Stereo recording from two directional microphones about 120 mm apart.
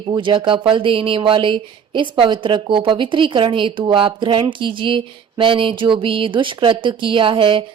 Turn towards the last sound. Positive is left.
turn(degrees=-45)  # may be behind; listen again after turning